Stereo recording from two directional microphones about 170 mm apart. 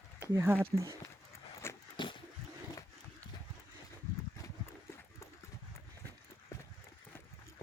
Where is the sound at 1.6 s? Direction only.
15° left (ahead or behind).